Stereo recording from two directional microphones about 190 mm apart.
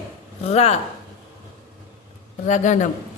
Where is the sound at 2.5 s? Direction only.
40° left (ahead or behind).